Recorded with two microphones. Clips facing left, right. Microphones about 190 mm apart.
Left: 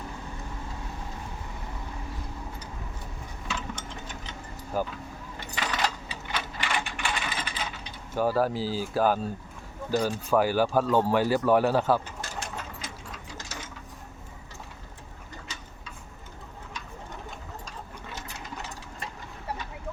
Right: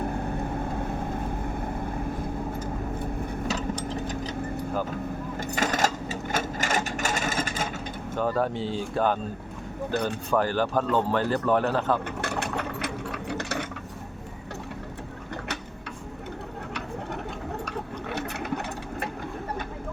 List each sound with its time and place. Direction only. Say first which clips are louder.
0.0 s vehicle: right 10 dB; 55° right (ahead or behind)
3.4 s a sound: right 4 dB; 35° right (ahead or behind)
5.5 s sewing machine: right 4 dB; 45° right (ahead or behind)
8.1 s speech: left 1 dB; 5° left (ahead or behind)
9.9 s speech: left 2 dB; 60° right (ahead or behind)
10.3 s speech: left 1 dB; 10° left (ahead or behind)
12.0 s ratchet: right 8 dB; 65° right (ahead or behind)
17.7 s sewing machine: right 9 dB; 65° right (ahead or behind)